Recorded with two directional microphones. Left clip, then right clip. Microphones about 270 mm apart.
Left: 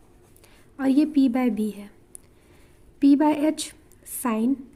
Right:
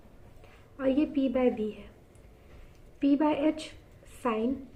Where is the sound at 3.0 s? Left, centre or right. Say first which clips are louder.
Left 6 dB; left.